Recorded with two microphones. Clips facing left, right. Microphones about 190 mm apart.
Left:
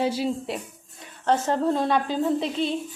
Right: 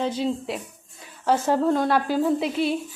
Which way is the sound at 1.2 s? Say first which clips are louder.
Right 2 dB; 10° right (ahead or behind).